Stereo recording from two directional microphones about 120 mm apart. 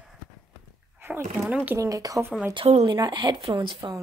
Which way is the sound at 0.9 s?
15° right (ahead or behind).